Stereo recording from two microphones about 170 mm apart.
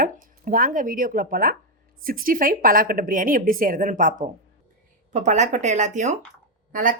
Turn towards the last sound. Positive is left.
turn(degrees=-50)  # may be behind; listen again after turning